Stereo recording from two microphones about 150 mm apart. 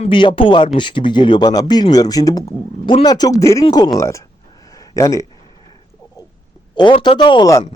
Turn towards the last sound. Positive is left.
turn(degrees=25)  # may be behind; listen again after turning